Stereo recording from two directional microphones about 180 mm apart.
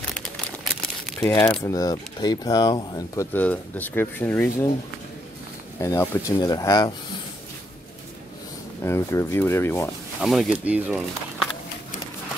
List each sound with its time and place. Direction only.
0.1 s crumpling: 5° left (ahead or behind)
1.2 s speech: 10° left (ahead or behind)
3.3 s speech: 10° left (ahead or behind)
5.8 s speech: 20° left (ahead or behind)
8.8 s speech: 15° left (ahead or behind)
10.2 s speech: centre (ahead or behind)